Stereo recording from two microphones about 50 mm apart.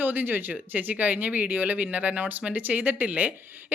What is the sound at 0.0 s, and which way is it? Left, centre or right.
Speech, right.